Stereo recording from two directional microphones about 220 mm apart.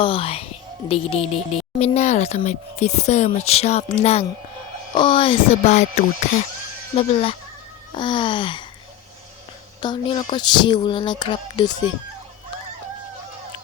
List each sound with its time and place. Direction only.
0.0 s speech: 25° left (ahead or behind)
9.8 s speech: 20° left (ahead or behind)